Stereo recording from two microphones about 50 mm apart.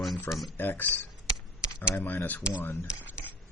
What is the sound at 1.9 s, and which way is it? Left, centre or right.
Speech, left.